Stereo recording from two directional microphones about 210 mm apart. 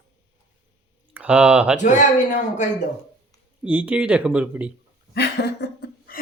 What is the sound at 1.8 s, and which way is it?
Speech, 35° left (ahead or behind).